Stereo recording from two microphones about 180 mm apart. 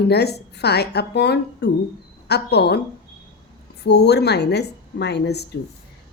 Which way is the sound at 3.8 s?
70° left (ahead or behind).